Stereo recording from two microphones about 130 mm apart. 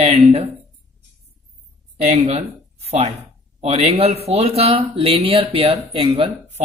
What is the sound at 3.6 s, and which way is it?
Speech, 50° right (ahead or behind).